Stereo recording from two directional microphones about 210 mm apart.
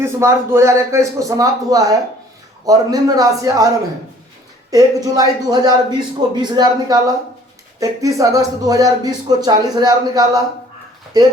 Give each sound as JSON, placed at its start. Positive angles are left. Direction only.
{"t": 0.0, "sound": "speech", "side_deg": -10}
{"t": 4.7, "sound": "speech", "side_deg": -15}